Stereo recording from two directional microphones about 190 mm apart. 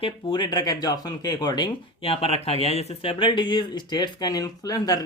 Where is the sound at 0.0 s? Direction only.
25° left (ahead or behind).